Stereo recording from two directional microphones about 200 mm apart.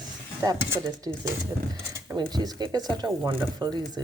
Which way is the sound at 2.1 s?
20° right (ahead or behind).